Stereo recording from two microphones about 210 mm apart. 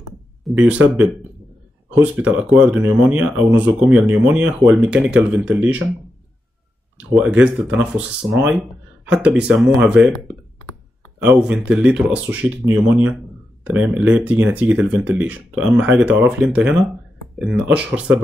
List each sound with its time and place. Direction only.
0.5 s speech: 5° right (ahead or behind)
7.2 s speech: 5° right (ahead or behind)
11.1 s speech: 5° right (ahead or behind)